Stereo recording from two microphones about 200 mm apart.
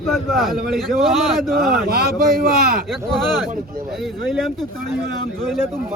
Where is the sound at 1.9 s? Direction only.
50° right (ahead or behind).